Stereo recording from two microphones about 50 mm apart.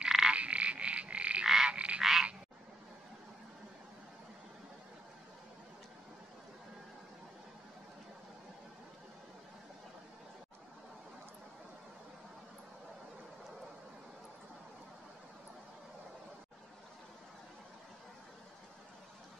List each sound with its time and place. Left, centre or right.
0.0 s frog: centre
0.3 s frog: right
1.4 s frog: centre
1.7 s frog: right
2.0 s frog: centre